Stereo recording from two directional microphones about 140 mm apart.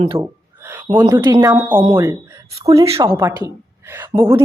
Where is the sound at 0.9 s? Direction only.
35° right (ahead or behind).